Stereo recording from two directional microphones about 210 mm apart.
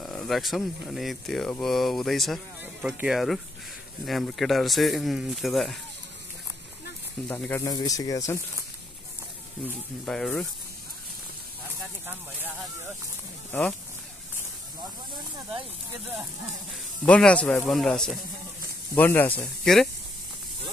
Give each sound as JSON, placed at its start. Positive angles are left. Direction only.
{"t": 0.0, "sound": "speech", "side_deg": 0}
{"t": 7.2, "sound": "speech", "side_deg": 10}
{"t": 9.7, "sound": "speech", "side_deg": 0}
{"t": 12.1, "sound": "speech", "side_deg": -10}
{"t": 13.5, "sound": "speech", "side_deg": 5}
{"t": 17.0, "sound": "speech", "side_deg": 5}